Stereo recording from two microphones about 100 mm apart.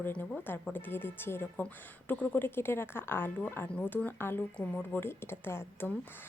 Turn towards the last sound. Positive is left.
turn(degrees=25)  # may be behind; listen again after turning